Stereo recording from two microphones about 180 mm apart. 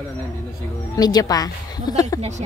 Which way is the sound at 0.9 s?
20° left (ahead or behind).